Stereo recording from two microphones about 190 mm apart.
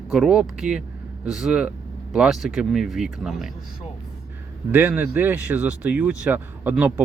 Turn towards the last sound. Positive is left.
turn(degrees=-10)  # may be behind; listen again after turning